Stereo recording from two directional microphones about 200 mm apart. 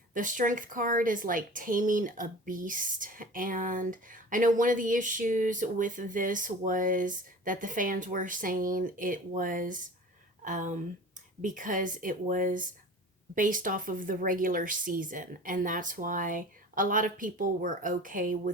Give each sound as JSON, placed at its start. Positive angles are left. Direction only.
{"t": 0.1, "sound": "a woman's voice", "side_deg": -40}